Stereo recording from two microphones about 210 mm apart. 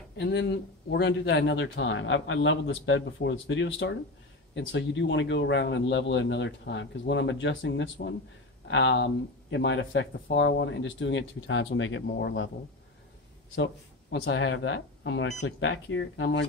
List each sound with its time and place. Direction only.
0.2 s speech: 55° left (ahead or behind)
14.2 s speech: 65° left (ahead or behind)